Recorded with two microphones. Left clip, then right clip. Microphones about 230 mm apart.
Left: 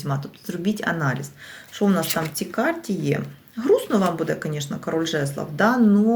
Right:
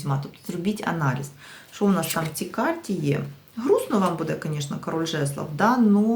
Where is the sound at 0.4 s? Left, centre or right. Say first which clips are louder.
Left 3 dB; centre.